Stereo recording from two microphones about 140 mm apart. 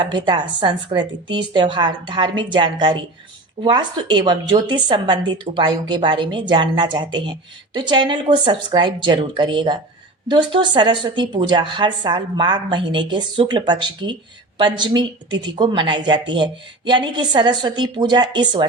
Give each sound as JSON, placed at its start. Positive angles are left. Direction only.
{"t": 0.0, "sound": "a woman's voice", "side_deg": -35}